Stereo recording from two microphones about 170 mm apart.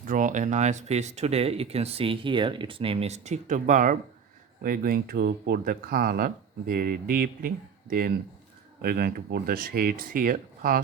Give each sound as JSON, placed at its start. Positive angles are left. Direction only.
{"t": 0.0, "sound": "speech", "side_deg": -50}